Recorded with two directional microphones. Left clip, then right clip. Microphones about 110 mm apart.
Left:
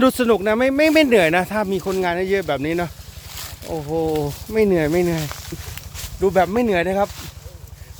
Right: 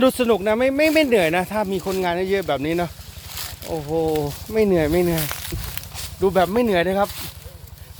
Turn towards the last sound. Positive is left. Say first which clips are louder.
# even
turn(degrees=15)  # may be behind; listen again after turning